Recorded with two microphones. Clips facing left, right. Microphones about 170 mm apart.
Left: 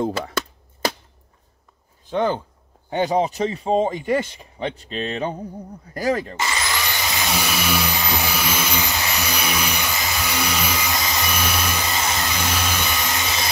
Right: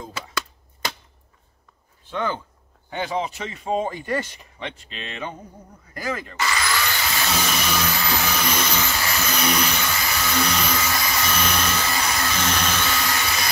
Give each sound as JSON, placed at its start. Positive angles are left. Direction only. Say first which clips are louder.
{"t": 2.0, "sound": "speech", "louder": "left 5 dB", "side_deg": 35}
{"t": 6.3, "sound": "vacuum cleaner", "louder": "right 1 dB", "side_deg": 25}